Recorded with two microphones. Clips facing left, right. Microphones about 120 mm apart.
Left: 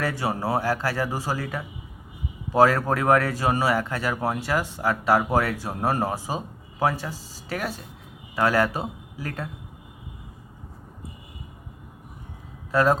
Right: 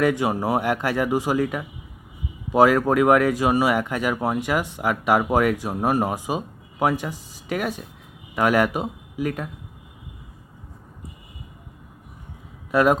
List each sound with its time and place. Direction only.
0.0 s speech: 20° right (ahead or behind)
12.7 s speech: 15° right (ahead or behind)